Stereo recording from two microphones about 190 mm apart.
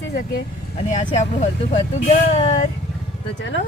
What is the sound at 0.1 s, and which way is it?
Speech, 50° left (ahead or behind).